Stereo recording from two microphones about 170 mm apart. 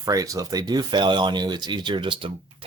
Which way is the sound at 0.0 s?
20° right (ahead or behind).